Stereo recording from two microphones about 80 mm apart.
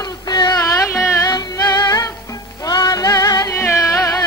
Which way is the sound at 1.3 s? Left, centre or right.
Left.